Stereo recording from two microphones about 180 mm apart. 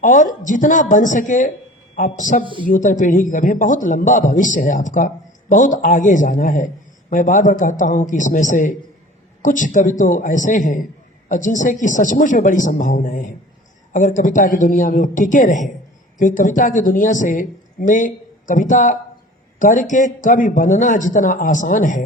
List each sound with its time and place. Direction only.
0.0 s a man's voice: 45° left (ahead or behind)
2.4 s speech: 25° left (ahead or behind)
2.6 s a man's voice: 45° left (ahead or behind)